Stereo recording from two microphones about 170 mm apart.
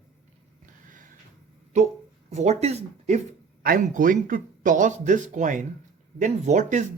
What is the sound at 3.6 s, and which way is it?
Speech, 55° right (ahead or behind).